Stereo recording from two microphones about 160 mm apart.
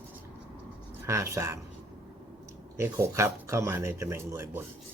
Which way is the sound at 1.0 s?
20° right (ahead or behind).